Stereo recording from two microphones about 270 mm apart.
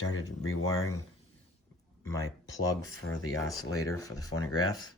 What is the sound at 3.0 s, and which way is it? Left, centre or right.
Speech, left.